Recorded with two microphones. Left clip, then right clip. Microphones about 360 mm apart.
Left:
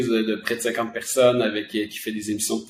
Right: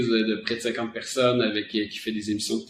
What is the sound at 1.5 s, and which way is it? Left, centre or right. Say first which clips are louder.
Speech: left 1 dB; centre.